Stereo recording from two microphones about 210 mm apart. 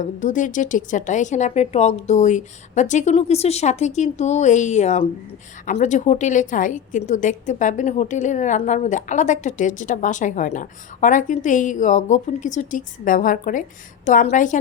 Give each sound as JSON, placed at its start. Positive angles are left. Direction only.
{"t": 0.0, "sound": "a woman's voice", "side_deg": 35}